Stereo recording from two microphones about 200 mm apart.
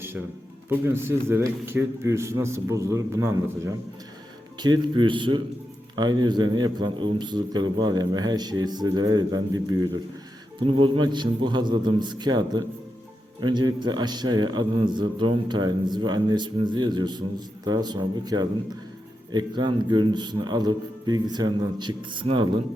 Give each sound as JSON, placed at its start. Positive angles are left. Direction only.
{"t": 0.7, "sound": "a man's voice", "side_deg": -10}